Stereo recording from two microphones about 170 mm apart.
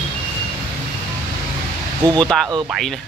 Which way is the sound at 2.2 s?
Centre (ahead or behind).